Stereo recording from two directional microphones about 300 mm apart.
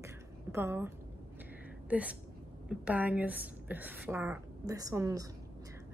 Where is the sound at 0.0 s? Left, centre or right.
Centre.